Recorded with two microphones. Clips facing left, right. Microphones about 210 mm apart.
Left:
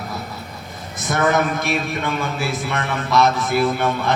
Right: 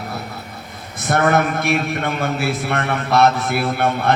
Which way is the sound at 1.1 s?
60° right (ahead or behind).